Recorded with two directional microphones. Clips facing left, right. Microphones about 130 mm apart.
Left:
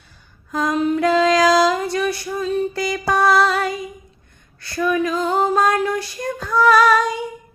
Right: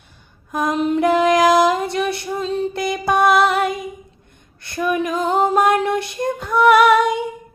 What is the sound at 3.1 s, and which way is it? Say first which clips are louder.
Music: right 1 dB; 20° right (ahead or behind).